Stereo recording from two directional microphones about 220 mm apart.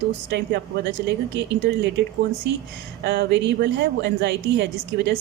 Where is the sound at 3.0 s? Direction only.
50° right (ahead or behind).